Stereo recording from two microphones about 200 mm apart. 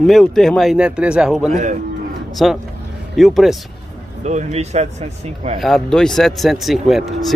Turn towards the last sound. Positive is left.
turn(degrees=0)  # may be behind; listen again after turning